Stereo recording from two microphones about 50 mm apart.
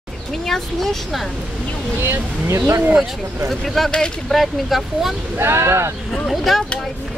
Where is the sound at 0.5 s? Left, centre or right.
Centre.